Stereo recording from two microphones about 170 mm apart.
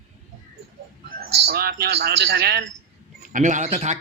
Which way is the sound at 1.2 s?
65° right (ahead or behind).